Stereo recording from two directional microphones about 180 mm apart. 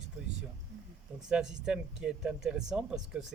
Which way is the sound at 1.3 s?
5° right (ahead or behind).